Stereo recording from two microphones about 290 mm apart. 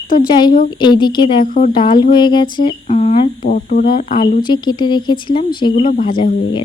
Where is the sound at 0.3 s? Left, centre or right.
Centre.